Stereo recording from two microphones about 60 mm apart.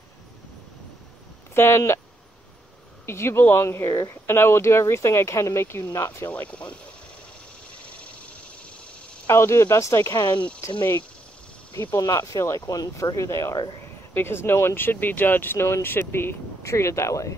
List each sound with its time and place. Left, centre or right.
1.5 s speech: left
3.1 s speech: left
6.5 s speech: centre
9.3 s speech: left
10.6 s speech: left
12.0 s speech: left
12.6 s speech: left
14.1 s speech: left
16.6 s speech: left